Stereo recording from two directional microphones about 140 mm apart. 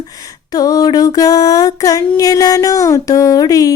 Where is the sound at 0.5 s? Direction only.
25° left (ahead or behind).